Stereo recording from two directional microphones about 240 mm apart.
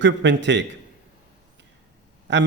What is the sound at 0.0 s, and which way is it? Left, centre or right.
Speech, right.